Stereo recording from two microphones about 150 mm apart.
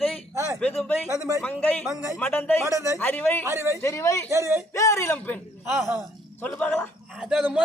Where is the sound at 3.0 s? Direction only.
10° left (ahead or behind).